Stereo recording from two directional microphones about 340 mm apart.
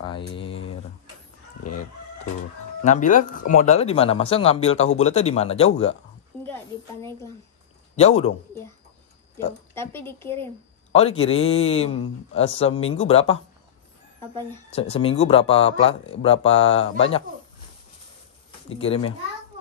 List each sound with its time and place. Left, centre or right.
2.8 s speech: left
6.4 s a sound: centre
7.9 s a man's voice: centre
9.8 s speech: centre
10.9 s speech: centre
14.7 s speech: centre
18.7 s speech: centre